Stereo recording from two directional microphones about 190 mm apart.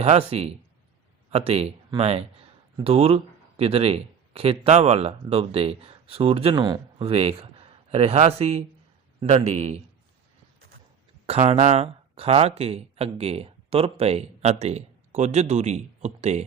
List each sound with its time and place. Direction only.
0.0 s speech: 35° right (ahead or behind)
11.3 s speech: 35° right (ahead or behind)